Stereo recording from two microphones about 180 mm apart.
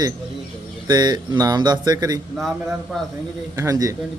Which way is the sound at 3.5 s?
20° right (ahead or behind).